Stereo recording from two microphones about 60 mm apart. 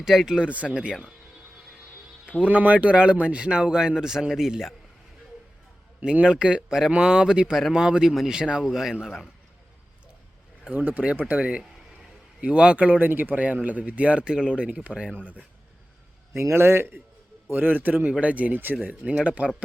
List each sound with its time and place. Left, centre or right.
0.0 s speech: centre
0.3 s a man's voice: right
2.4 s a man's voice: right; by 4.7 s centre
6.1 s a man's voice: centre
10.6 s a man's voice: right
16.3 s a man's voice: right
17.5 s a man's voice: right